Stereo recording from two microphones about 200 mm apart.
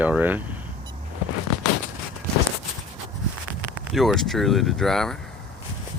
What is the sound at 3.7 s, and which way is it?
Speech, centre (ahead or behind).